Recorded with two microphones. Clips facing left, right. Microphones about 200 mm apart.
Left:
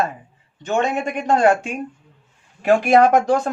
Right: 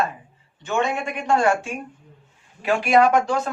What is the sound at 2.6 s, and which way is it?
Speech, 45° left (ahead or behind).